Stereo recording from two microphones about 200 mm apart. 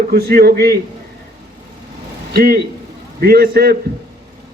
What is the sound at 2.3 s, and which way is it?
A man's voice, 50° right (ahead or behind).